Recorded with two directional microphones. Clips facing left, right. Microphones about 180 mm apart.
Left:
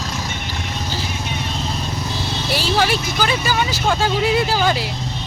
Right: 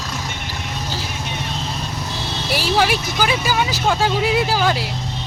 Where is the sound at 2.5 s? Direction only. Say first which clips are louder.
Right 1 dB; 10° right (ahead or behind).